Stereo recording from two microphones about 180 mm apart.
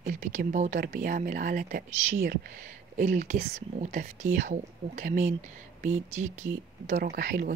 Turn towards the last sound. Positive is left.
turn(degrees=-50)  # may be behind; listen again after turning